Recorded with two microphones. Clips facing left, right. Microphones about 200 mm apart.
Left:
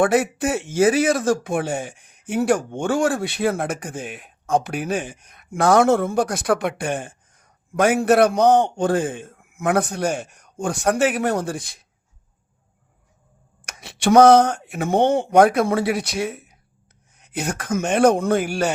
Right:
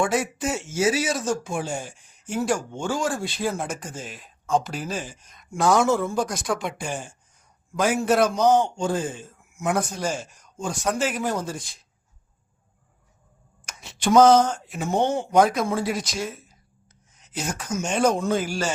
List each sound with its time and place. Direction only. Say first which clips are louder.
0.0 s speech: left 6 dB; 60° left (ahead or behind)
13.7 s speech: left 4 dB; 65° left (ahead or behind)